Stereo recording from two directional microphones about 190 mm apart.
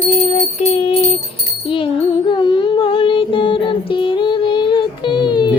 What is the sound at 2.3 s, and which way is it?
Child singing, 25° left (ahead or behind).